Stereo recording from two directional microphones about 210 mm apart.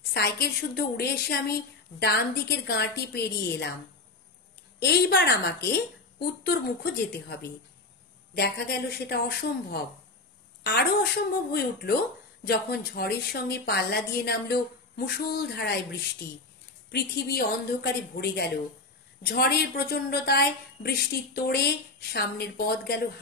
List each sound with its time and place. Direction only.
0.1 s a woman's voice: 50° left (ahead or behind)
4.7 s a woman's voice: 50° left (ahead or behind)
8.4 s a woman's voice: 50° left (ahead or behind)